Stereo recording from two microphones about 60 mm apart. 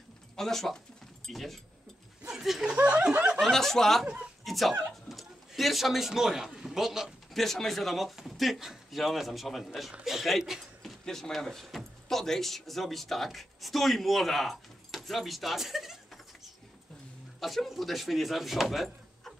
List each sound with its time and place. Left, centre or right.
0.4 s speech: centre
2.2 s a sound: centre
2.6 s speech: centre
3.3 s speech: centre
4.0 s speech: centre
4.5 s speech: centre
7.3 s speech: centre
17.4 s speech: centre